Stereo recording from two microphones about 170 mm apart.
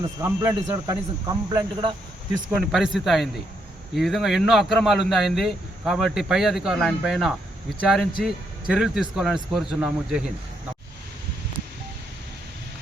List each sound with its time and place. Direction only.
0.2 s speech: 15° right (ahead or behind)
1.5 s speech: 25° right (ahead or behind)
2.6 s speech: centre (ahead or behind)